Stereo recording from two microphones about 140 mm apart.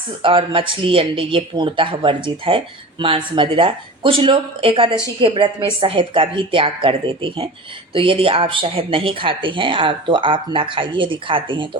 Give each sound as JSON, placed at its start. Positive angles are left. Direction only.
{"t": 0.2, "sound": "speech", "side_deg": -40}